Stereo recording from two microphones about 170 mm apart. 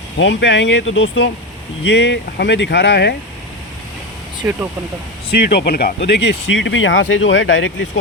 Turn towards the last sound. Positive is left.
turn(degrees=90)